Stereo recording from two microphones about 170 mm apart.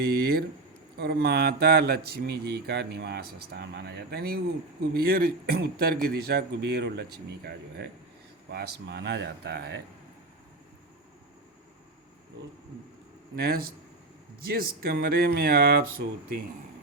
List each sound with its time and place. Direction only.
0.0 s a sound: 65° right (ahead or behind)
0.9 s speech: 70° right (ahead or behind)
13.3 s speech: 65° right (ahead or behind)